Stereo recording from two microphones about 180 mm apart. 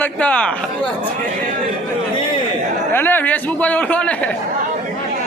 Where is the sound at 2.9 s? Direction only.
10° left (ahead or behind).